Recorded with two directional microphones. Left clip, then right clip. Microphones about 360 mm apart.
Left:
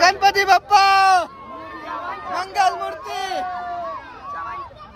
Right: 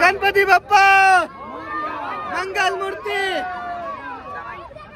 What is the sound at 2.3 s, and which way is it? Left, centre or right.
Speech, centre.